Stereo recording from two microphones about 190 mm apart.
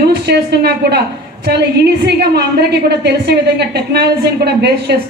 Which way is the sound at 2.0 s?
60° right (ahead or behind).